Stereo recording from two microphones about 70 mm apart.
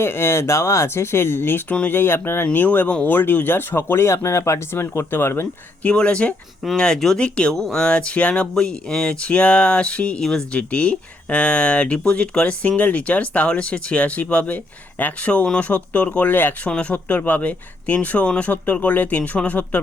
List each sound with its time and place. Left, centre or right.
0.0 s speech: left
5.8 s speech: centre
7.5 s speech: centre; by 19.8 s left